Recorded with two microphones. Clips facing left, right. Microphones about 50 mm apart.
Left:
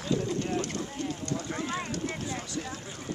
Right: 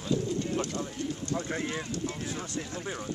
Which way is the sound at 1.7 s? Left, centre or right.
Left.